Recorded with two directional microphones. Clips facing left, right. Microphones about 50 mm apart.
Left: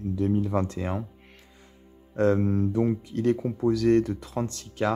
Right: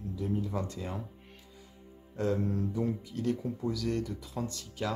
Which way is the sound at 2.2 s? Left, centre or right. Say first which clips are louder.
Left 8 dB; left.